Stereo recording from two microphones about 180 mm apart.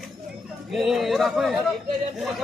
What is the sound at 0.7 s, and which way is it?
Speech, centre (ahead or behind).